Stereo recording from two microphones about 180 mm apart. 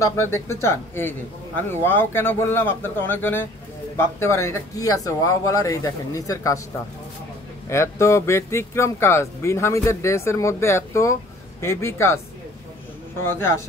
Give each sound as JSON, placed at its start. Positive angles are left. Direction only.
{"t": 0.0, "sound": "speech", "side_deg": 15}
{"t": 7.7, "sound": "speech", "side_deg": 15}
{"t": 13.2, "sound": "speech", "side_deg": 15}